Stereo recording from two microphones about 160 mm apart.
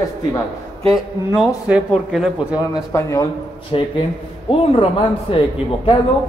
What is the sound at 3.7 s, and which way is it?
A man's voice, 30° left (ahead or behind).